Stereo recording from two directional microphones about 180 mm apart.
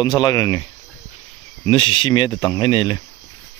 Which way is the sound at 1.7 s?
30° left (ahead or behind).